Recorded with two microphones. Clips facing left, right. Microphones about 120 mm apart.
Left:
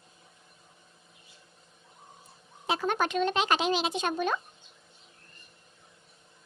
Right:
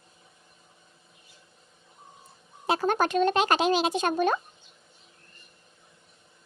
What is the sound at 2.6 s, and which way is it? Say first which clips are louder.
Speech: right 4 dB; 40° right (ahead or behind).